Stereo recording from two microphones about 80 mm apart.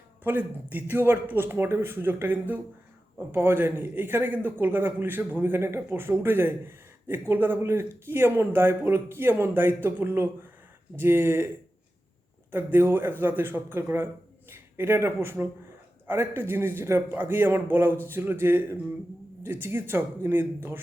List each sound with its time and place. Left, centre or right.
0.3 s a man's voice: right
12.5 s a man's voice: right